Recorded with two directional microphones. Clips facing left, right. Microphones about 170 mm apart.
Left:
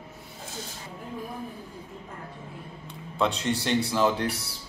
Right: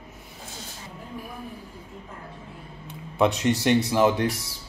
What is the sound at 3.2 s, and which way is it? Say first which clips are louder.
Speech: right 5 dB; 15° right (ahead or behind).